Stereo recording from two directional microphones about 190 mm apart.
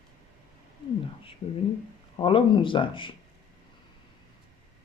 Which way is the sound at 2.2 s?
25° left (ahead or behind).